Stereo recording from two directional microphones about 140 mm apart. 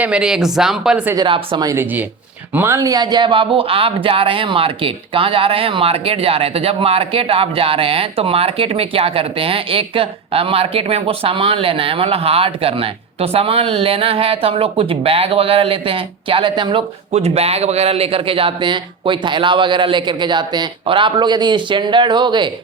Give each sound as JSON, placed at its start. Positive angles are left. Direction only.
{"t": 0.0, "sound": "speech", "side_deg": -5}
{"t": 1.1, "sound": "speech", "side_deg": -35}
{"t": 1.6, "sound": "speech", "side_deg": -20}
{"t": 17.1, "sound": "speech", "side_deg": -50}